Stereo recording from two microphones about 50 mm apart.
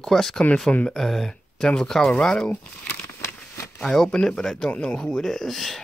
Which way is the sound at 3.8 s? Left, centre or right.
Centre.